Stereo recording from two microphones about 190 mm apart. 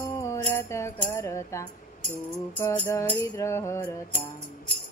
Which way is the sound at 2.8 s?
15° left (ahead or behind).